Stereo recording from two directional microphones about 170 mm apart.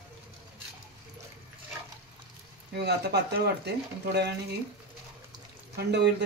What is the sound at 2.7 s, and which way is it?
Speech, 75° right (ahead or behind).